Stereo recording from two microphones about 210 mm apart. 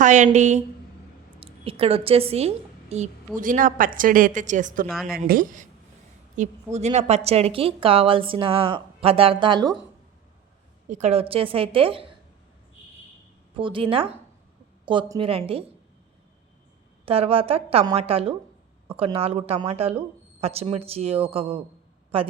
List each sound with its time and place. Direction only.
0.0 s a woman's voice: 35° right (ahead or behind)
4.9 s a woman's voice: centre (ahead or behind)
5.1 s a woman's voice: 45° right (ahead or behind); by 9.7 s 20° right (ahead or behind)
10.8 s a woman's voice: 35° right (ahead or behind)
13.6 s a woman's voice: 25° right (ahead or behind)
17.1 s a woman's voice: 25° right (ahead or behind)